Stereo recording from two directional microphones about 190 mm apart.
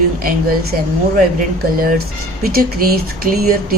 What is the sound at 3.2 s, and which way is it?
Speech, 50° right (ahead or behind).